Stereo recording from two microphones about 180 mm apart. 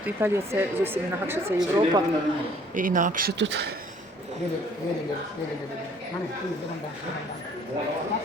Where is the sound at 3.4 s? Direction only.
75° right (ahead or behind).